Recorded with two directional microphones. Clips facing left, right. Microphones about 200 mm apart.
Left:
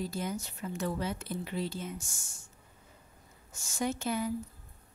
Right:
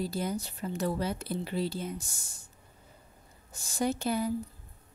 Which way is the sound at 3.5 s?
35° right (ahead or behind).